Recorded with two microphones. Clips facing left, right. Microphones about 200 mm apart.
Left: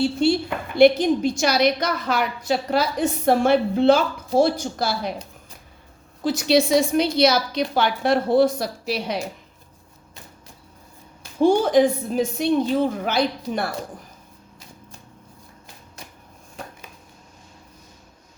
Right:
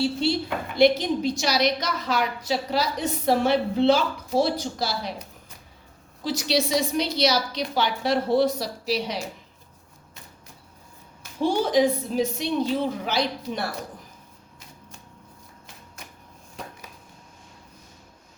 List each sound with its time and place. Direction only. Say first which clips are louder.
0.2 s a woman's voice: left 5 dB; 50° left (ahead or behind)
6.2 s a woman's voice: left 6 dB; 50° left (ahead or behind)
11.3 s a woman's voice: left 5 dB; 50° left (ahead or behind)